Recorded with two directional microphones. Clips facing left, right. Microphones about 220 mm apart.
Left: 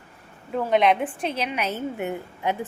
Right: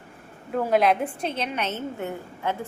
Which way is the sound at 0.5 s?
5° right (ahead or behind).